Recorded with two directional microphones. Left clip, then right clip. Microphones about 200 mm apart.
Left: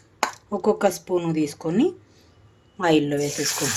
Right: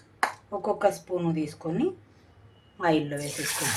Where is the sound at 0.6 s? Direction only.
50° left (ahead or behind).